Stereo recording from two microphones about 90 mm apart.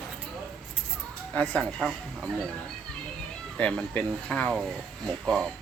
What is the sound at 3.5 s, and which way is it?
Speech, 10° left (ahead or behind).